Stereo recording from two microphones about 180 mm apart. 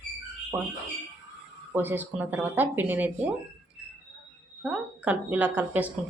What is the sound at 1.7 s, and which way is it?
A woman's voice, 10° right (ahead or behind).